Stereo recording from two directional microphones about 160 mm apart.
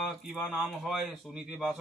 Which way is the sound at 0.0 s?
Centre (ahead or behind).